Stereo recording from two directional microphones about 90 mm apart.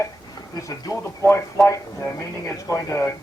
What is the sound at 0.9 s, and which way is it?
Speech, 40° left (ahead or behind).